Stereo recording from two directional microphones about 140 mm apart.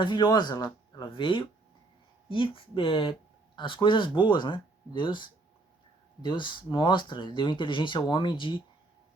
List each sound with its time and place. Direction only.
0.0 s speech: 35° left (ahead or behind)